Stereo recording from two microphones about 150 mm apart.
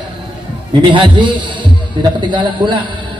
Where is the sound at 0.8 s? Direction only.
30° right (ahead or behind).